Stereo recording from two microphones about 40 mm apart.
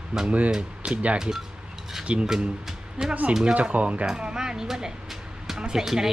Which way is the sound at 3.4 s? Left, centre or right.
Right.